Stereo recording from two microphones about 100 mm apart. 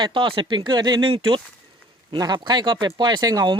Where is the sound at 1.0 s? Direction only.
60° right (ahead or behind).